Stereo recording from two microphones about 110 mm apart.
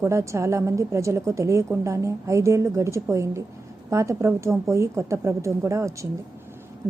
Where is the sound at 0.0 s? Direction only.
25° right (ahead or behind).